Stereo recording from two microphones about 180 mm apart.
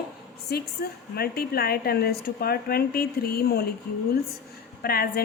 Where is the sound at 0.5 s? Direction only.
60° left (ahead or behind).